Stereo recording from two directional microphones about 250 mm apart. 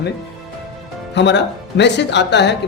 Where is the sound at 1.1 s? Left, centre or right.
Left.